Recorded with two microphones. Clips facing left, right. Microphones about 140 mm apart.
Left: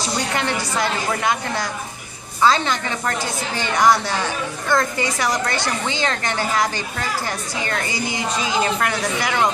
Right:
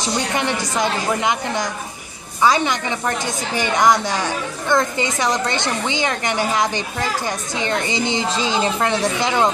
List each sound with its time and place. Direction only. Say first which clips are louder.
0.0 s a woman's voice: right 2 dB; 20° right (ahead or behind)